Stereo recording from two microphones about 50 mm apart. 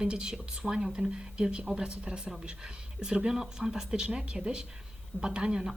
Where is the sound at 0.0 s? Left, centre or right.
Centre.